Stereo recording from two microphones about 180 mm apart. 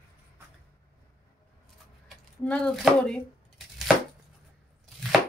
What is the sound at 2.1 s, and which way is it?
Speech, 5° left (ahead or behind).